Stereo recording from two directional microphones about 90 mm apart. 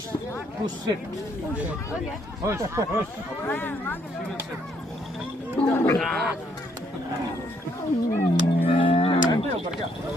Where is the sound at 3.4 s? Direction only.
20° left (ahead or behind).